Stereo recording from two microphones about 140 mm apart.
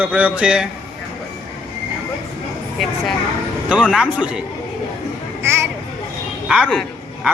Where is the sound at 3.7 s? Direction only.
5° right (ahead or behind).